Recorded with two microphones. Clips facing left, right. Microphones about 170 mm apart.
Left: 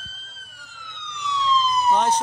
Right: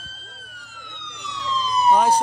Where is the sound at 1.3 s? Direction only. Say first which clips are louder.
Left 6 dB; 55° right (ahead or behind).